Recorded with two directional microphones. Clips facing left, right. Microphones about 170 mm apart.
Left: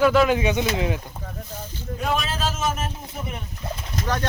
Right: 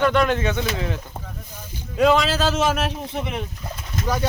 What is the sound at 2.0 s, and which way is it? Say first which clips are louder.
A man's voice: right 8 dB; 90° right.